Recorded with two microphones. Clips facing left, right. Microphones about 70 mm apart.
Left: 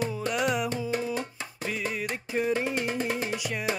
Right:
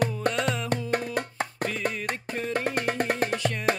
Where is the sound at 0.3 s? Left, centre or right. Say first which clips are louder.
Left 1 dB; centre.